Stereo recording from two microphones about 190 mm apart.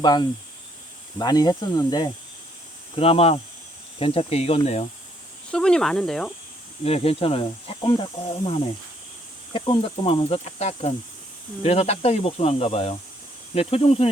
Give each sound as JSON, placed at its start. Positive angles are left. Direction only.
{"t": 0.0, "sound": "speech", "side_deg": 20}
{"t": 5.5, "sound": "speech", "side_deg": 5}
{"t": 6.8, "sound": "speech", "side_deg": 30}